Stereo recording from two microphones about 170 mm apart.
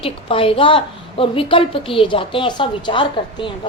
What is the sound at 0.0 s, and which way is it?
A woman's voice, 35° left (ahead or behind).